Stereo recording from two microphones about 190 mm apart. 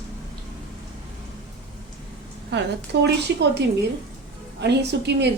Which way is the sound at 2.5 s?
65° right (ahead or behind).